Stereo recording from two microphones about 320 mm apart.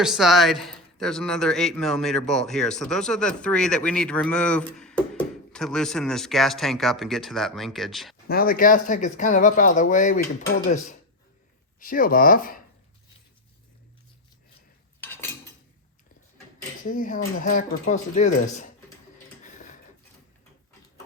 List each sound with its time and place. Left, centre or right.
0.0 s speech: centre
8.3 s speech: left
11.8 s speech: left
16.8 s speech: left